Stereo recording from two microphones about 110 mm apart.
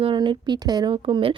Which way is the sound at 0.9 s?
55° right (ahead or behind).